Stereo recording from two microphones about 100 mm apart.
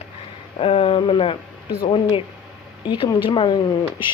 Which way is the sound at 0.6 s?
70° left (ahead or behind).